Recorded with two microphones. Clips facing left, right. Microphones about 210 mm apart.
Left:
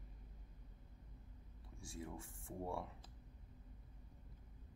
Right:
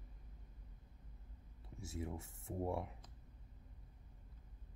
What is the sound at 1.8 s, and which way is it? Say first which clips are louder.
Speech: right 4 dB; 20° right (ahead or behind).